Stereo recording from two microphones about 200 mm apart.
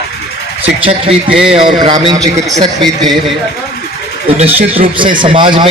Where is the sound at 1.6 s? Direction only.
25° right (ahead or behind).